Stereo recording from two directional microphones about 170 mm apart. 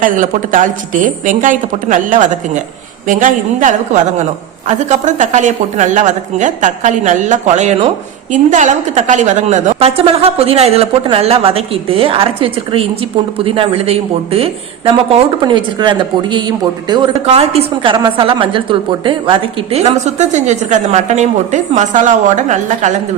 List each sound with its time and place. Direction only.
0.0 s a woman's voice: 50° right (ahead or behind); by 17.1 s 25° right (ahead or behind)
17.3 s a woman's voice: 35° right (ahead or behind)